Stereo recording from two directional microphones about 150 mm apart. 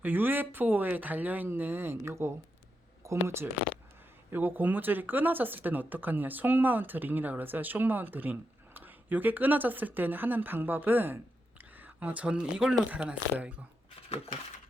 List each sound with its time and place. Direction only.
0.0 s speech: 15° right (ahead or behind)